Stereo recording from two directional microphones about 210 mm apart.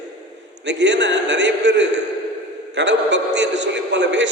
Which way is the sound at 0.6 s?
55° right (ahead or behind).